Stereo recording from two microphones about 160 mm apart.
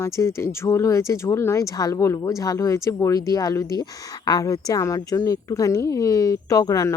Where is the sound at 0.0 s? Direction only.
15° left (ahead or behind).